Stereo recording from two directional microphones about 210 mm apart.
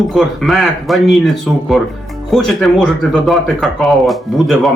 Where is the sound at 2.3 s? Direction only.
Centre (ahead or behind).